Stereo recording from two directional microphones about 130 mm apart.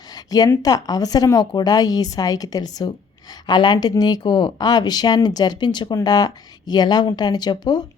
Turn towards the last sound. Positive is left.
turn(degrees=35)  # may be behind; listen again after turning